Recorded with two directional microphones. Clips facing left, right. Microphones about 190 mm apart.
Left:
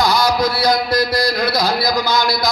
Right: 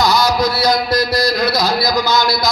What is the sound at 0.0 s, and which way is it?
Mantra, 55° left (ahead or behind).